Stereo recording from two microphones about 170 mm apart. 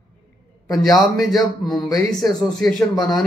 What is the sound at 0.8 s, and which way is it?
Speech, centre (ahead or behind).